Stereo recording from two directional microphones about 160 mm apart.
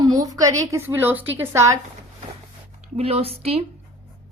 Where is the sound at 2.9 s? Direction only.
40° right (ahead or behind).